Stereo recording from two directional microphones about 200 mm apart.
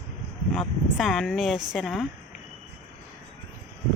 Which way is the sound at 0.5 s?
Centre (ahead or behind).